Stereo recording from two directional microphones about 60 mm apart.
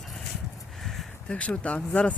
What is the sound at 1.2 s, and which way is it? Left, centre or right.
Speech, centre.